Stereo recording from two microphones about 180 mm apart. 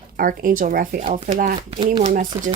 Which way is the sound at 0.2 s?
50° right (ahead or behind).